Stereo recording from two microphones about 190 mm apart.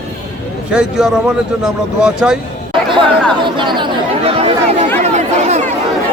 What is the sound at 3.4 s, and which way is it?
Chatter, 25° right (ahead or behind).